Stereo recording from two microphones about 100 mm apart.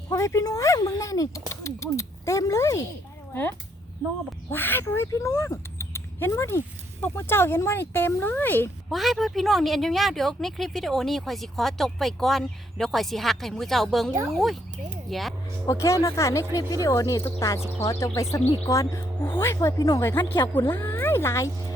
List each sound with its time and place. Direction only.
0.1 s speech: 30° left (ahead or behind)
4.5 s speech: 20° left (ahead or behind)
8.9 s speech: centre (ahead or behind)
14.1 s speech: 35° right (ahead or behind)
14.3 s speech: centre (ahead or behind)
15.6 s speech: 30° left (ahead or behind)